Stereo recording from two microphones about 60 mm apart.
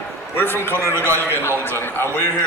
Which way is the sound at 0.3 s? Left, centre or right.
Left.